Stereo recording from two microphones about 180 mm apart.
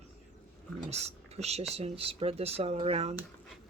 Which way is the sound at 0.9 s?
35° right (ahead or behind).